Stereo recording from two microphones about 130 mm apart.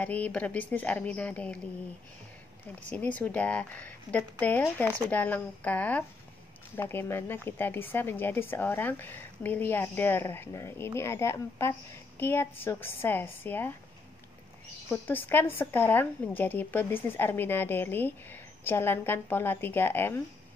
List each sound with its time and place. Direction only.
0.0 s speech: 10° left (ahead or behind)
2.9 s speech: 10° left (ahead or behind)
14.9 s speech: 15° left (ahead or behind)